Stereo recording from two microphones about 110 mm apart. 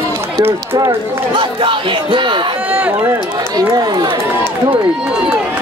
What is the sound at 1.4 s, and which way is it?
Speech, 50° right (ahead or behind).